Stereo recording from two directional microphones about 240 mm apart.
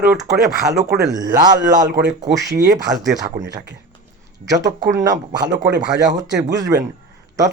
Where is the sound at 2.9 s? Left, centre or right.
Centre.